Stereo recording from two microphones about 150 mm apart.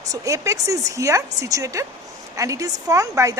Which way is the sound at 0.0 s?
20° right (ahead or behind).